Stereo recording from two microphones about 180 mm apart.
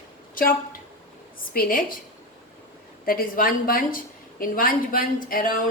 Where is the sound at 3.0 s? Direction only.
50° left (ahead or behind).